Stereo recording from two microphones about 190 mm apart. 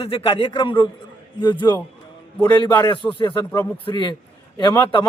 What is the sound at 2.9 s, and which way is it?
Speech, 25° left (ahead or behind).